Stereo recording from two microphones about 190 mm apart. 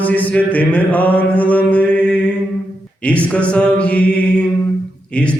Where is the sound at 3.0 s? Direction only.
5° left (ahead or behind).